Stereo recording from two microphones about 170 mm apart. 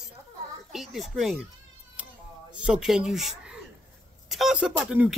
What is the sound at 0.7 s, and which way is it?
Speech, centre (ahead or behind).